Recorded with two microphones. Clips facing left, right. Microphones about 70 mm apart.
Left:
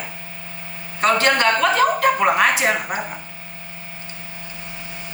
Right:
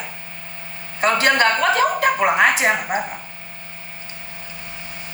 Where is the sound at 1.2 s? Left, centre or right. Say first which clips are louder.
Right 3 dB; centre.